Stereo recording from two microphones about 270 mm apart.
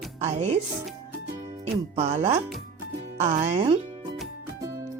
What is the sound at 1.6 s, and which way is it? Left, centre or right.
Speech, right.